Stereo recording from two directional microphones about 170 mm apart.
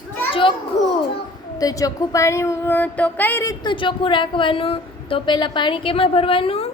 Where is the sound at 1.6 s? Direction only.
20° left (ahead or behind).